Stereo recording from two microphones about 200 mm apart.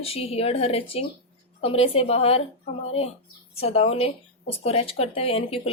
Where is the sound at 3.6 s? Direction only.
30° left (ahead or behind).